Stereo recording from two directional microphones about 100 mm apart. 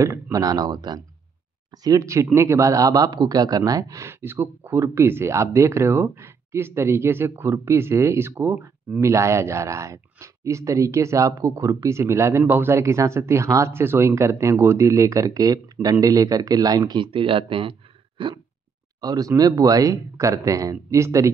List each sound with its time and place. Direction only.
0.0 s a man's voice: 35° right (ahead or behind); by 18.3 s 60° right (ahead or behind)
18.9 s speech: 40° right (ahead or behind)